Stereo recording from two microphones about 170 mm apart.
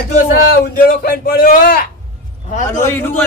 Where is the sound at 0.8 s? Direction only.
60° left (ahead or behind).